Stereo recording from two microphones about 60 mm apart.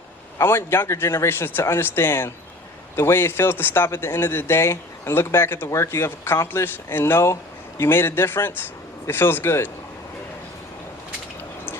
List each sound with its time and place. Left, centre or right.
0.3 s speech: left